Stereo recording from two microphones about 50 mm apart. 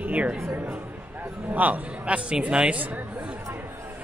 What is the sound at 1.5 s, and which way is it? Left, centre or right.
Speech, right.